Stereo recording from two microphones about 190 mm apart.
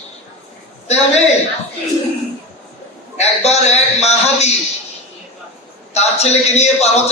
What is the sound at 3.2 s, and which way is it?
A man's voice, 35° left (ahead or behind).